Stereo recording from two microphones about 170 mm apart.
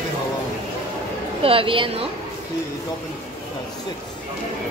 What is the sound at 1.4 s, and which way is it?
Speech, 30° right (ahead or behind).